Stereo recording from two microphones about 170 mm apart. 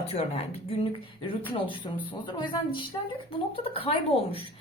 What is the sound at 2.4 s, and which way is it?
A woman's voice, 25° left (ahead or behind).